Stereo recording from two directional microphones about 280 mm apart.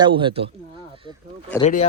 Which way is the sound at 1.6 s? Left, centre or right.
Left.